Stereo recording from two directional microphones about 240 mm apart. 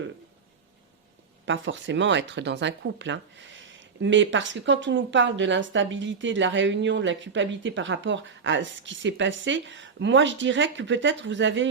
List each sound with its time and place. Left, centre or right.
1.5 s speech: right